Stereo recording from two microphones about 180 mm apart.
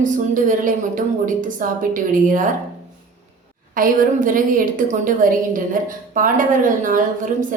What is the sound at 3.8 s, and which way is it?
A woman's voice, 50° right (ahead or behind).